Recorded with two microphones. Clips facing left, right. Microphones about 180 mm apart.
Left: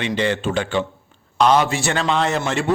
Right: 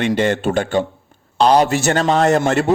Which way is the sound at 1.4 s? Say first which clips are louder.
Right 3 dB; 35° right (ahead or behind).